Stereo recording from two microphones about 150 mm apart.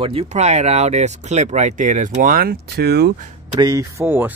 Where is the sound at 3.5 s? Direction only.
25° right (ahead or behind).